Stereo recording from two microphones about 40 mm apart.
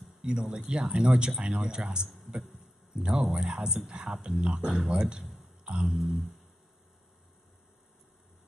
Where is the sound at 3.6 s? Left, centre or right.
Centre.